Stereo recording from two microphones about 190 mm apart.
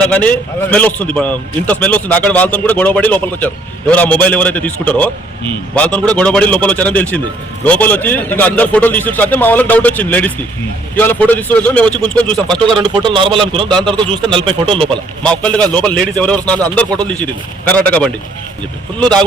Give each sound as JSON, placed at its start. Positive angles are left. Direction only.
{"t": 0.0, "sound": "a man's voice", "side_deg": 10}
{"t": 12.7, "sound": "a man's voice", "side_deg": -25}
{"t": 15.2, "sound": "a man's voice", "side_deg": 5}